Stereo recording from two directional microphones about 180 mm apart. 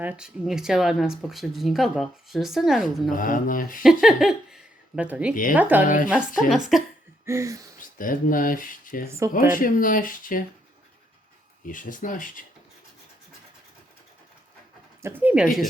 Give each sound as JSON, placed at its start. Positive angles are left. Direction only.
{"t": 0.0, "sound": "speech", "side_deg": -5}
{"t": 3.1, "sound": "speech", "side_deg": 50}
{"t": 4.0, "sound": "speech", "side_deg": 0}
{"t": 5.3, "sound": "speech", "side_deg": 50}
{"t": 5.5, "sound": "a sound", "side_deg": -10}
{"t": 5.8, "sound": "speech", "side_deg": 45}
{"t": 6.1, "sound": "speech", "side_deg": -5}
{"t": 7.3, "sound": "a sound", "side_deg": -15}
{"t": 7.8, "sound": "speech", "side_deg": 50}
{"t": 9.0, "sound": "a sound", "side_deg": -15}
{"t": 9.5, "sound": "speech", "side_deg": 50}
{"t": 11.6, "sound": "speech", "side_deg": 45}
{"t": 15.0, "sound": "a sound", "side_deg": -10}